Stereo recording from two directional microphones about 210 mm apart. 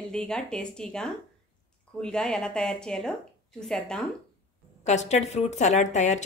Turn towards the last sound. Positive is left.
turn(degrees=35)  # may be behind; listen again after turning